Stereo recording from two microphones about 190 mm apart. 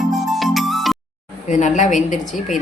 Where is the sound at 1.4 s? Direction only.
40° left (ahead or behind).